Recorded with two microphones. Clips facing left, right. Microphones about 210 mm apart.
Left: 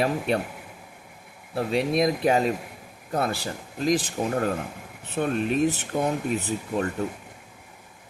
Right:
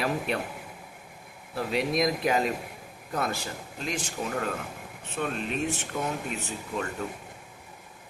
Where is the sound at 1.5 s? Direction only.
30° left (ahead or behind).